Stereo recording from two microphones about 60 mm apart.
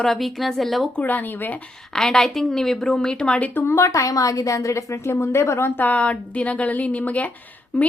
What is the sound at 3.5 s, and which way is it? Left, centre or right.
Speech, left.